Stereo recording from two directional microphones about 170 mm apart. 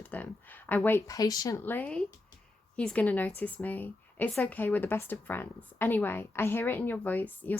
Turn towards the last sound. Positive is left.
turn(degrees=10)  # may be behind; listen again after turning